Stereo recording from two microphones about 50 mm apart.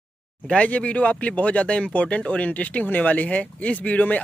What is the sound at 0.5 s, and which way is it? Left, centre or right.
Speech, left.